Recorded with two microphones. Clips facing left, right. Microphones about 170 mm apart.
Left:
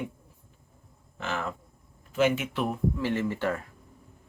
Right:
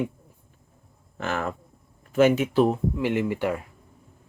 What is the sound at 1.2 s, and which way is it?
Speech, 50° right (ahead or behind).